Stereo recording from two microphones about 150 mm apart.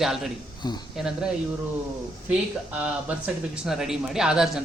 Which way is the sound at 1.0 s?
5° right (ahead or behind).